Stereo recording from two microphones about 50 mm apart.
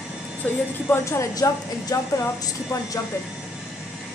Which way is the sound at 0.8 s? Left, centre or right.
Left.